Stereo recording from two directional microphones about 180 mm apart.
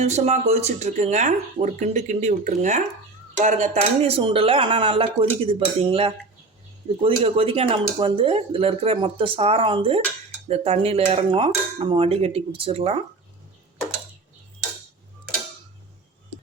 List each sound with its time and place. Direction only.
0.0 s speech: 35° right (ahead or behind)